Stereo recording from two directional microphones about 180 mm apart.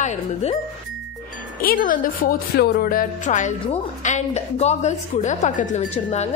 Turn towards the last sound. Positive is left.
turn(degrees=40)  # may be behind; listen again after turning